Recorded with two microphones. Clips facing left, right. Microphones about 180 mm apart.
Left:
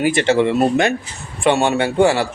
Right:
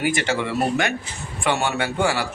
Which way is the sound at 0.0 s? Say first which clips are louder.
Left 8 dB; 25° left (ahead or behind).